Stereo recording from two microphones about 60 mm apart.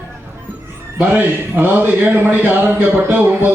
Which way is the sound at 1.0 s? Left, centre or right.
Right.